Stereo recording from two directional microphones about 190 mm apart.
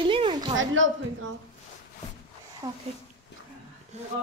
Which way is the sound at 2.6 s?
20° right (ahead or behind).